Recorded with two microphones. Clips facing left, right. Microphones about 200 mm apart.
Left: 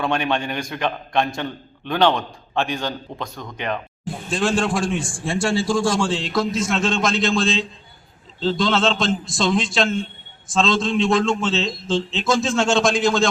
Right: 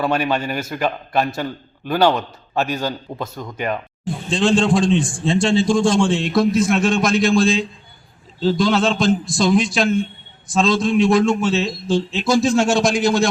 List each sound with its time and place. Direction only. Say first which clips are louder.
0.0 s a man's voice: right 2 dB; 5° right (ahead or behind)
4.3 s a man's voice: right 5 dB; 25° right (ahead or behind)
9.2 s a man's voice: right 4 dB; centre (ahead or behind)
10.5 s a man's voice: right 3 dB; 15° right (ahead or behind)